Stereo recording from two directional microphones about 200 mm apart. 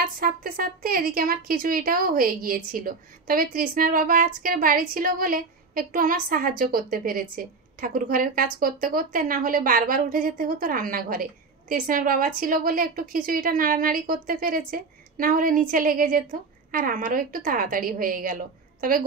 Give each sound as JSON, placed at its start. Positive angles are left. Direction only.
{"t": 0.0, "sound": "a woman's voice", "side_deg": -45}